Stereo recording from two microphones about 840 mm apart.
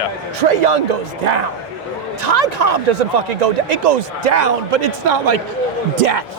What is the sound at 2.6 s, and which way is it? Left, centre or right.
A man's voice, right.